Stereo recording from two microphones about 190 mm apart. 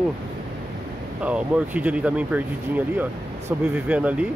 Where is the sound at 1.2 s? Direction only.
5° right (ahead or behind).